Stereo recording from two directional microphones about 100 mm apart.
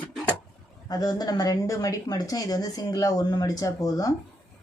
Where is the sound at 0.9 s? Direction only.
40° left (ahead or behind).